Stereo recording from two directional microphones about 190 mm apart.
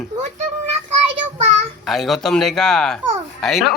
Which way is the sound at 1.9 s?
Centre (ahead or behind).